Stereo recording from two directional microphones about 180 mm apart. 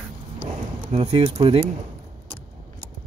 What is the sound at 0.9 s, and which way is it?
Speech, 35° right (ahead or behind).